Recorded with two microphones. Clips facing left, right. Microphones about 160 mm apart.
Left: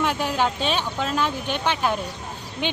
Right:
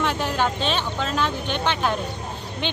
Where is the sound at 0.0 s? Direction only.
10° left (ahead or behind).